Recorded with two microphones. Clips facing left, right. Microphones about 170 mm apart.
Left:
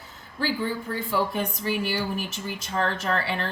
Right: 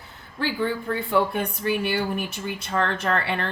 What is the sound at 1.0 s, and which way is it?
Speech, 60° right (ahead or behind).